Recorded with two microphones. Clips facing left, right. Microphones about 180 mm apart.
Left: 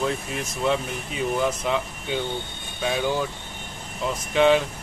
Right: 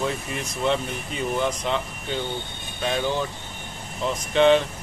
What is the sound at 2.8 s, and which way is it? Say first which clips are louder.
Speech: even; 5° left (ahead or behind).